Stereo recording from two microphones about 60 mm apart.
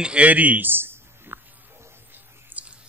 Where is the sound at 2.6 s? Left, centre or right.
Right.